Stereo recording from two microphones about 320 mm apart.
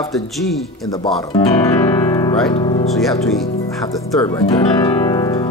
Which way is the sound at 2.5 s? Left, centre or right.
Centre.